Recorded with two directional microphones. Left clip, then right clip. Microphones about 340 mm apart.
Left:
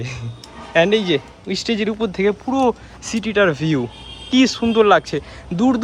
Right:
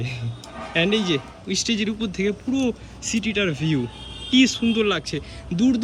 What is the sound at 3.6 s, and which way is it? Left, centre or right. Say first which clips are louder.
Speech: left 4 dB; centre.